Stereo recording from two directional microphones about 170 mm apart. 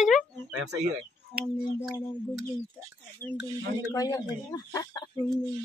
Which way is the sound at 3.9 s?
20° left (ahead or behind).